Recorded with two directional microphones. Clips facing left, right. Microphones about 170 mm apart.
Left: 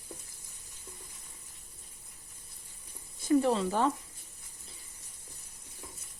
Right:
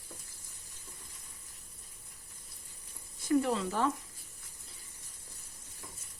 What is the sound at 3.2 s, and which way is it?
Speech, 30° left (ahead or behind).